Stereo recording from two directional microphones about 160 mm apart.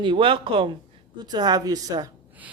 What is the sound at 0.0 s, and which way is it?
Speech, 30° right (ahead or behind).